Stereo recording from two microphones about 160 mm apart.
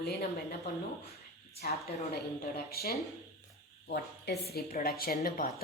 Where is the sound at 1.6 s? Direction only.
70° left (ahead or behind).